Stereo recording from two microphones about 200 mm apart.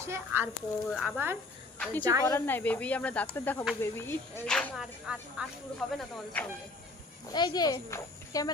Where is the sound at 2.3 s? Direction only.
10° left (ahead or behind).